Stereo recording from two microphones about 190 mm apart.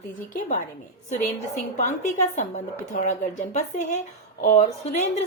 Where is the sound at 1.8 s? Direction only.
40° left (ahead or behind).